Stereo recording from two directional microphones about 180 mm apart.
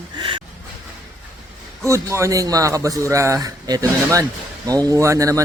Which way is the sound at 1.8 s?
15° right (ahead or behind).